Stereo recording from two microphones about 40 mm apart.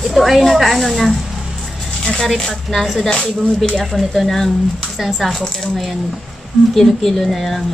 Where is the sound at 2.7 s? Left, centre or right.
Centre.